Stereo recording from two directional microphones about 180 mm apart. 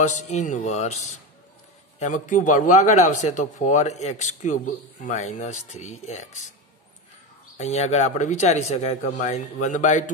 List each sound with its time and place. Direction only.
0.0 s a man's voice: 40° left (ahead or behind)
7.5 s a man's voice: 40° left (ahead or behind)